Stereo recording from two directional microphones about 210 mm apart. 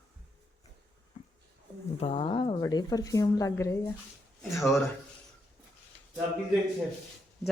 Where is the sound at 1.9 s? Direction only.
25° left (ahead or behind).